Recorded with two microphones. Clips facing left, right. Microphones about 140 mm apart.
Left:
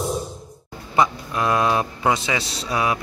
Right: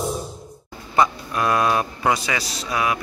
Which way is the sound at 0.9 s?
20° left (ahead or behind).